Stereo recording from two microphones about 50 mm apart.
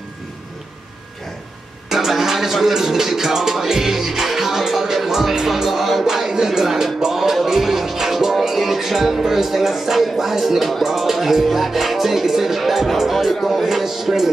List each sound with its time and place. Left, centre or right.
1.9 s music: centre